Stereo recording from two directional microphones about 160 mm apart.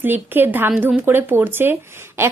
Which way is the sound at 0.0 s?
10° right (ahead or behind).